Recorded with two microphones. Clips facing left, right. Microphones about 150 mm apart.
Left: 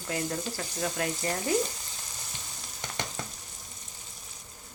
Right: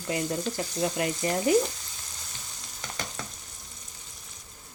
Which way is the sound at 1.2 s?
15° right (ahead or behind).